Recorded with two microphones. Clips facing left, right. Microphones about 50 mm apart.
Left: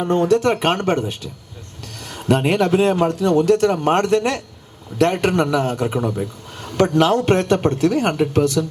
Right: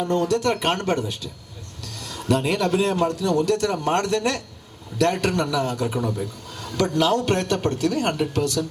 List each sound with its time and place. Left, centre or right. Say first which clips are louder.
0.0 s a man's voice: left 5 dB; left
2.0 s a sound: left 4 dB; left
2.7 s a man's voice: left 5 dB; left